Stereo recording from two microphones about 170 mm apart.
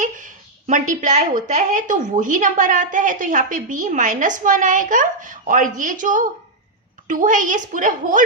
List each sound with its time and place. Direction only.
0.0 s a woman's voice: 50° right (ahead or behind)